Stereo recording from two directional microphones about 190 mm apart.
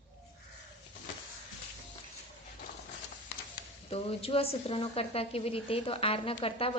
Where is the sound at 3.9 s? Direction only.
30° left (ahead or behind).